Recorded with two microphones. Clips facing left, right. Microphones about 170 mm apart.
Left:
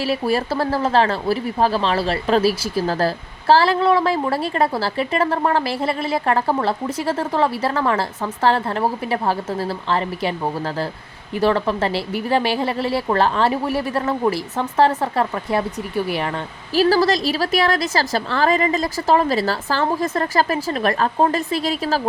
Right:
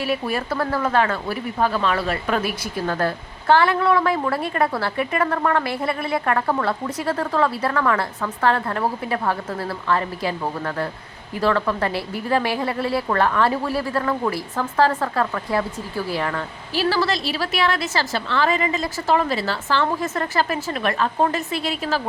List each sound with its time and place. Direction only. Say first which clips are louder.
0.0 s speech: left 4 dB; 30° left (ahead or behind)
16.7 s a woman's voice: left 5 dB; 40° left (ahead or behind)